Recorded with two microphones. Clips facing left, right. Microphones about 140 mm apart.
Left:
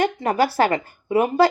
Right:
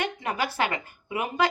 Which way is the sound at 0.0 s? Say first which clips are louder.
Left 9 dB; 40° left (ahead or behind).